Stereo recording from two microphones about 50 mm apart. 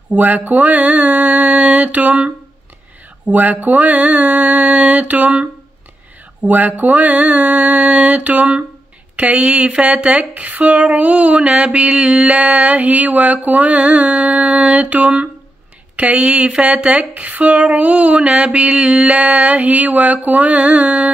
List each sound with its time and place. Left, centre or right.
0.1 s mantra: right
9.1 s speech: right